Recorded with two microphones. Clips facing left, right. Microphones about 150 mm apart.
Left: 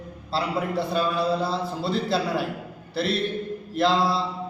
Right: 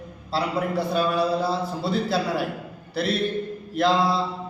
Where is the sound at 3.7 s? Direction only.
Centre (ahead or behind).